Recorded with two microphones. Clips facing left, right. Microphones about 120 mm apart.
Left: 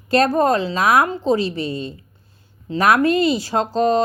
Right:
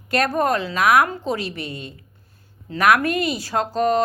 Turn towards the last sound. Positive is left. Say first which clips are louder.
# left 2 dB
turn(degrees=25)  # may be behind; listen again after turning